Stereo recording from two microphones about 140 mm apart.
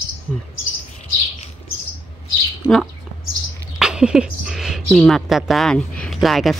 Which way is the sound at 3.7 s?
5° right (ahead or behind).